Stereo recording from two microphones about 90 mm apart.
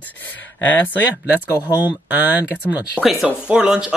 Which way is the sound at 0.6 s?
20° left (ahead or behind).